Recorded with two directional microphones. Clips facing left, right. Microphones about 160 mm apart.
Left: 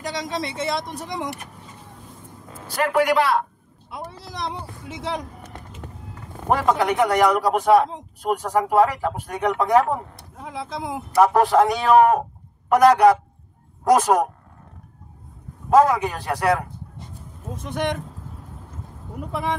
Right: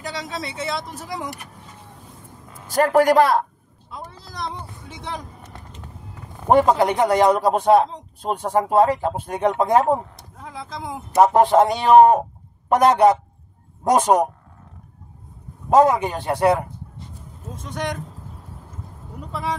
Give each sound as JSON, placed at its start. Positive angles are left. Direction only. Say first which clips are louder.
{"t": 0.3, "sound": "speech", "louder": "left 3 dB", "side_deg": -5}
{"t": 2.7, "sound": "a man's voice", "louder": "right 4 dB", "side_deg": -40}
{"t": 3.9, "sound": "speech", "louder": "left 2 dB", "side_deg": 5}
{"t": 6.5, "sound": "speech", "louder": "right 4 dB", "side_deg": -25}
{"t": 10.3, "sound": "vehicle", "louder": "left 3 dB", "side_deg": 10}
{"t": 11.1, "sound": "speech", "louder": "right 2 dB", "side_deg": -25}
{"t": 15.7, "sound": "speech", "louder": "right 1 dB", "side_deg": -25}
{"t": 17.7, "sound": "speech", "louder": "left 2 dB", "side_deg": 5}